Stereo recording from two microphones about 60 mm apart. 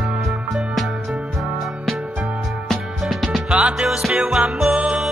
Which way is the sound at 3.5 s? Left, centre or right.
Centre.